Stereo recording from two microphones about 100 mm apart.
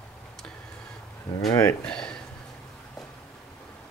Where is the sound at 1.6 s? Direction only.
10° left (ahead or behind).